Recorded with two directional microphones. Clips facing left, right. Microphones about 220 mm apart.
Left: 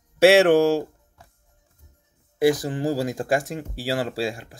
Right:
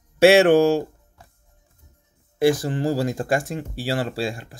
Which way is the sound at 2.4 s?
15° left (ahead or behind).